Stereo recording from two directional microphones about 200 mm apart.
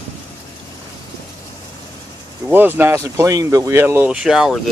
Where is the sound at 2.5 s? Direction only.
10° right (ahead or behind).